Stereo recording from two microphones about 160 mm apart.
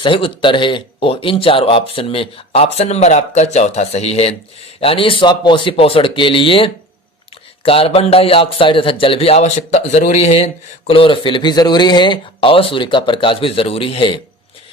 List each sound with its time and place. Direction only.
0.0 s a man's voice: 30° left (ahead or behind)